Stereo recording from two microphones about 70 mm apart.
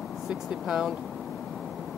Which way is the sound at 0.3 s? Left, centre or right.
Centre.